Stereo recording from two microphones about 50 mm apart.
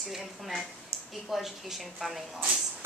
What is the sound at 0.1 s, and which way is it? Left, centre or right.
A woman's voice, centre.